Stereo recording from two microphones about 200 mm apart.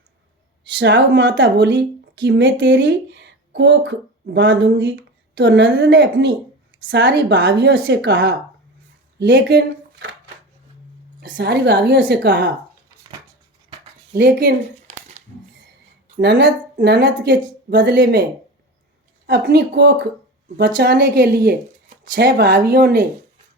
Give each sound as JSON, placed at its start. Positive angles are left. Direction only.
{"t": 0.8, "sound": "speech", "side_deg": -65}
{"t": 9.1, "sound": "a sound", "side_deg": -60}
{"t": 11.3, "sound": "speech", "side_deg": -55}
{"t": 14.2, "sound": "speech", "side_deg": -60}
{"t": 14.9, "sound": "a sound", "side_deg": -35}
{"t": 16.1, "sound": "speech", "side_deg": -60}
{"t": 19.3, "sound": "a woman's voice", "side_deg": -55}